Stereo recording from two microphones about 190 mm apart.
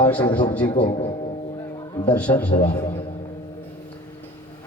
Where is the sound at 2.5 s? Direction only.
25° left (ahead or behind).